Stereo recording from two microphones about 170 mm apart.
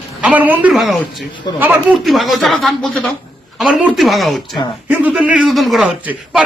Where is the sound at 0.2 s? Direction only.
10° right (ahead or behind).